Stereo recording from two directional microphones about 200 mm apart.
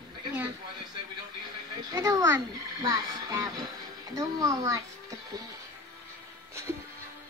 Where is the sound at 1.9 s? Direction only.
15° right (ahead or behind).